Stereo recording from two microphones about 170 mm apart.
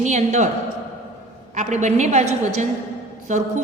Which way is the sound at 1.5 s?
45° right (ahead or behind).